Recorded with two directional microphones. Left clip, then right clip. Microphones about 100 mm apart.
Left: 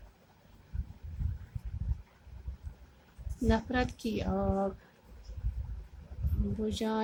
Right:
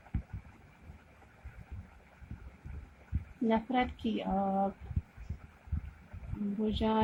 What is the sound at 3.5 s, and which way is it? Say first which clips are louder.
Female singing: even; 45° left (ahead or behind).